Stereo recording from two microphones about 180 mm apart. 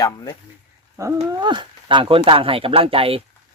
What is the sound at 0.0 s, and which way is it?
Speech, 20° left (ahead or behind).